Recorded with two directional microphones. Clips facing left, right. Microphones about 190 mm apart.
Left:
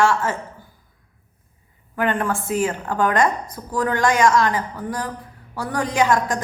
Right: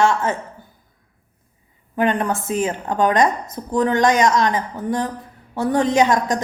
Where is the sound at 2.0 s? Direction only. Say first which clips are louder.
Right 2 dB; 20° right (ahead or behind).